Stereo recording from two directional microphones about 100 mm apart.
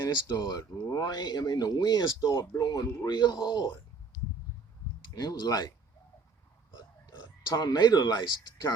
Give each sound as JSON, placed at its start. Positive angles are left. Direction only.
{"t": 0.3, "sound": "speech", "side_deg": 40}
{"t": 5.1, "sound": "speech", "side_deg": 40}
{"t": 7.5, "sound": "speech", "side_deg": 40}